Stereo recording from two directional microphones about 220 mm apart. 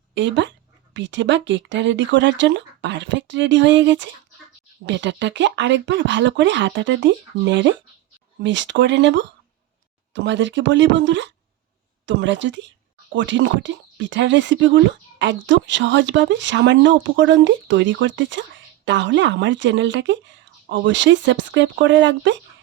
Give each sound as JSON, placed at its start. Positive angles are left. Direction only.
{"t": 0.1, "sound": "speech", "side_deg": -55}